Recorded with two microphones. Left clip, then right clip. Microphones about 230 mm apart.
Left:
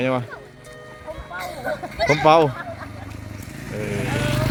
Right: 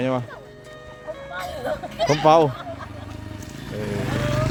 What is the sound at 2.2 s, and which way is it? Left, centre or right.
Speech, centre.